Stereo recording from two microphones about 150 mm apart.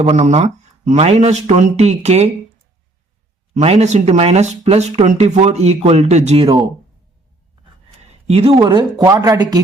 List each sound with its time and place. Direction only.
0.0 s speech: 50° right (ahead or behind)
3.5 s speech: 45° right (ahead or behind)
8.3 s speech: 40° right (ahead or behind)
8.6 s speech: 25° right (ahead or behind)